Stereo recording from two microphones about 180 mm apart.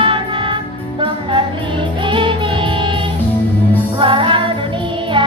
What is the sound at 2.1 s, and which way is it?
Music, 25° right (ahead or behind).